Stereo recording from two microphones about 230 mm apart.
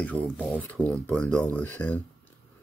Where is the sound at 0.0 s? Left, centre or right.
Centre.